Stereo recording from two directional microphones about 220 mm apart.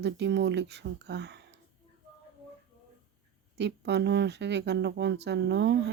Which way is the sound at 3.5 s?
50° right (ahead or behind).